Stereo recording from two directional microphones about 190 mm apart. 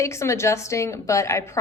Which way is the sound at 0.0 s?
15° left (ahead or behind).